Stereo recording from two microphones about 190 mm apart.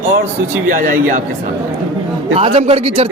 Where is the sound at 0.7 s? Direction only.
45° right (ahead or behind).